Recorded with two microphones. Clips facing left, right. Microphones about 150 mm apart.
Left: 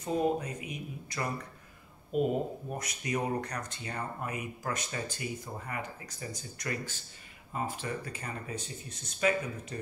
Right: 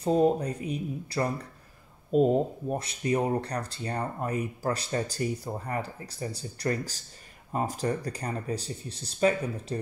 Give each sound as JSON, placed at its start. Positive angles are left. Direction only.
{"t": 0.0, "sound": "speech", "side_deg": -35}